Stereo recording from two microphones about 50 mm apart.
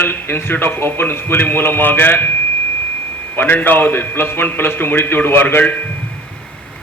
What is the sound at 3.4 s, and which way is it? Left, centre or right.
A man's voice, left.